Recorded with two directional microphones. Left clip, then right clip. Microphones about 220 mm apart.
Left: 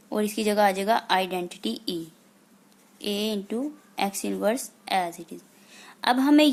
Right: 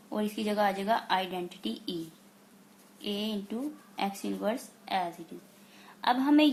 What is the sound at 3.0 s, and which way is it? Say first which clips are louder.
A woman's voice: left 6 dB; 50° left (ahead or behind).